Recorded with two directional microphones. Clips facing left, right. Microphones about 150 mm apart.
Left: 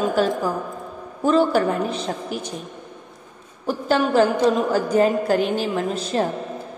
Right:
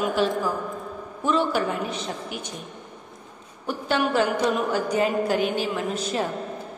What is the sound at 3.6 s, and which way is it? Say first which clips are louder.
A woman's voice: left 4 dB; 35° left (ahead or behind).